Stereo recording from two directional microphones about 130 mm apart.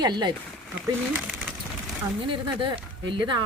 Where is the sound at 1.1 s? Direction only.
10° right (ahead or behind).